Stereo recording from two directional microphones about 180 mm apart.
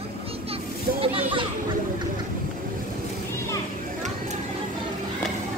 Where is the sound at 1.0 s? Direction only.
30° right (ahead or behind).